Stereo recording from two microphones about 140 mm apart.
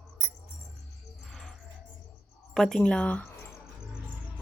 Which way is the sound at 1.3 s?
Centre (ahead or behind).